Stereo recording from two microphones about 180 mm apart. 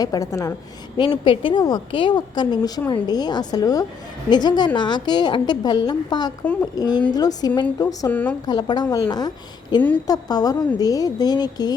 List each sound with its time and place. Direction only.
0.0 s a woman's voice: 20° left (ahead or behind)
6.4 s a woman's voice: 10° left (ahead or behind)
6.7 s a woman's voice: 20° left (ahead or behind)
8.4 s a woman's voice: 25° left (ahead or behind)